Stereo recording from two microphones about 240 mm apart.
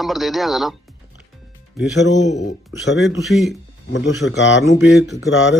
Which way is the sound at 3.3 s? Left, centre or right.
Centre.